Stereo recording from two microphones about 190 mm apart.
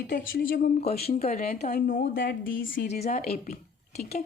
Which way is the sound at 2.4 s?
85° left.